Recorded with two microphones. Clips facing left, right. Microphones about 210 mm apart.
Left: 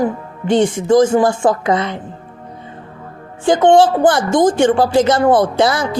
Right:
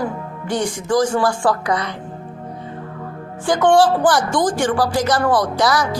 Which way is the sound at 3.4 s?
20° left (ahead or behind).